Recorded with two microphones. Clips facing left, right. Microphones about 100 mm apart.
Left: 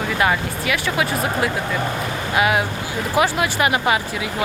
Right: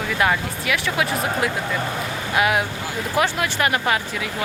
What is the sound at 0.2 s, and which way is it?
Speech, centre (ahead or behind).